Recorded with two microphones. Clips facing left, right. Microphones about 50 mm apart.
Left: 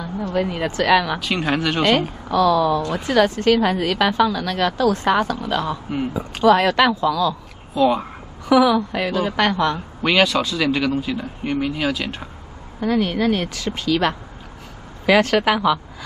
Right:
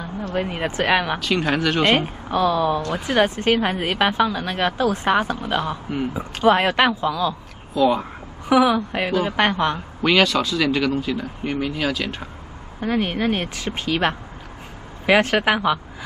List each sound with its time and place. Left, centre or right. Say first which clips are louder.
0.3 s speech: left 2 dB; right
1.2 s speech: even; centre
2.0 s speech: left 2 dB; right
7.8 s speech: left 1 dB; centre
8.5 s speech: left 2 dB; right
10.0 s speech: even; centre
12.8 s speech: left 2 dB; right